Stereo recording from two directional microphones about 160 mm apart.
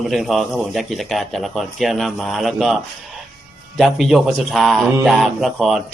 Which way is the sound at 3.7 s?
Centre (ahead or behind).